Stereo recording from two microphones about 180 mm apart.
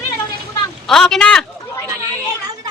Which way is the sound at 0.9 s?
Centre (ahead or behind).